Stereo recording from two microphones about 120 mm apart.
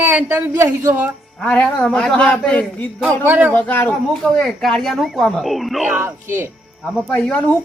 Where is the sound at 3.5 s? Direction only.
15° left (ahead or behind).